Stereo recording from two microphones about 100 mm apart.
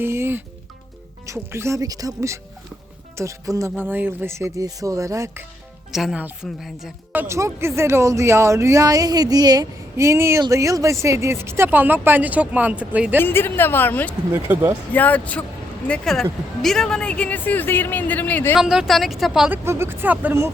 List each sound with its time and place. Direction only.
0.0 s music: 25° right (ahead or behind)
1.2 s speech: 25° right (ahead or behind)
3.8 s speech: 20° right (ahead or behind)
5.9 s a woman's voice: 5° right (ahead or behind)
6.1 s a woman's voice: 15° right (ahead or behind)
6.6 s a woman's voice: 5° right (ahead or behind)
7.3 s speech: 30° right (ahead or behind)
10.0 s speech: 30° right (ahead or behind)
13.1 s a woman's voice: 20° left (ahead or behind)
18.6 s a woman's voice: 5° right (ahead or behind)
19.5 s speech: 25° right (ahead or behind)